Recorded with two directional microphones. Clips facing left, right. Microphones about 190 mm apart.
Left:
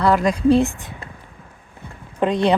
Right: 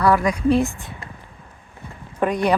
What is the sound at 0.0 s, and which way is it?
Speech, 25° left (ahead or behind).